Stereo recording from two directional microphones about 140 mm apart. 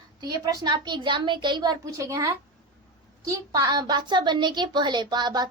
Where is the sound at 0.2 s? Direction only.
25° right (ahead or behind).